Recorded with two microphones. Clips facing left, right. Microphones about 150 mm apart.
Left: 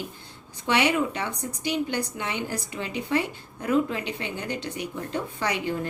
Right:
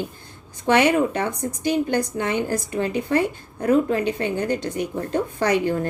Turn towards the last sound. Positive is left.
turn(degrees=-45)  # may be behind; listen again after turning